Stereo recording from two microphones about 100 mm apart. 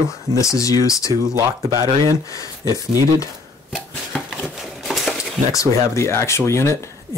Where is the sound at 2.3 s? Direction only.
35° left (ahead or behind).